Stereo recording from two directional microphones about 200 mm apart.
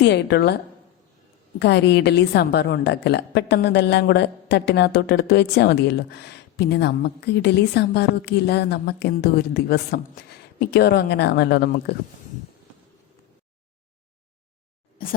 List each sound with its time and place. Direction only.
0.0 s a woman's voice: 55° left (ahead or behind)
1.5 s a woman's voice: 60° left (ahead or behind)
15.0 s speech: 45° left (ahead or behind)